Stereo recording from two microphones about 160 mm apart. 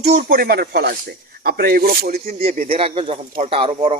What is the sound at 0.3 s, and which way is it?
Speech, 70° right (ahead or behind).